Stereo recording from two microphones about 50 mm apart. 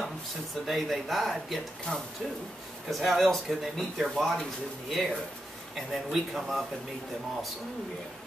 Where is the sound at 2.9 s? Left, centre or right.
Centre.